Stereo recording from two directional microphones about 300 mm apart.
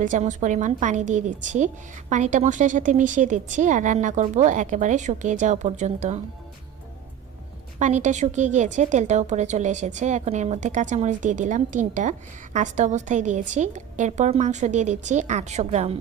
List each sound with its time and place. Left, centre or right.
0.0 s a woman's voice: right
7.8 s a woman's voice: right